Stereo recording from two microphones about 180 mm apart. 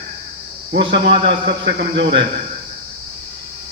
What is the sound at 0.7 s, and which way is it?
Speech, 75° right (ahead or behind).